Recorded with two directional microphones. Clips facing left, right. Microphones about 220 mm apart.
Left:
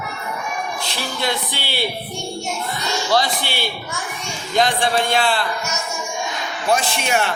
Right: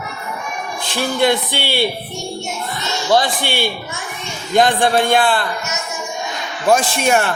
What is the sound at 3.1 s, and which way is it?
A man's voice, 50° right (ahead or behind).